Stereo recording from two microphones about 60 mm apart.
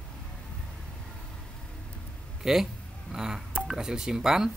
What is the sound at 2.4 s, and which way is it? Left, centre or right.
A man's voice, centre.